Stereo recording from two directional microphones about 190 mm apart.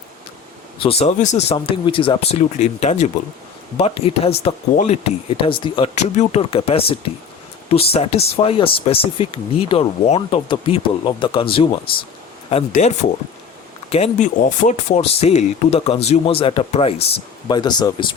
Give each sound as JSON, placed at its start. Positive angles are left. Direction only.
{"t": 0.8, "sound": "speech", "side_deg": 30}